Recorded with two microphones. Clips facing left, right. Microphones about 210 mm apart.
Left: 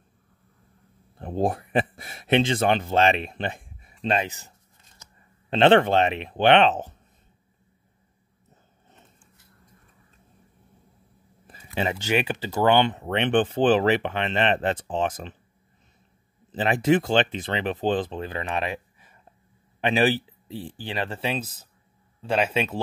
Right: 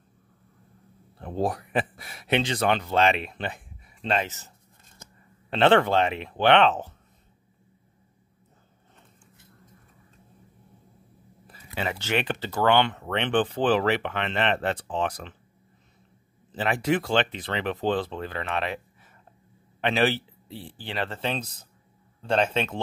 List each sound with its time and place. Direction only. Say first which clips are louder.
1.5 s speech: left 3 dB; 25° left (ahead or behind)
5.5 s speech: left 2 dB; 20° left (ahead or behind)
11.4 s speech: left 4 dB; 20° left (ahead or behind)
16.5 s speech: left 4 dB; 20° left (ahead or behind)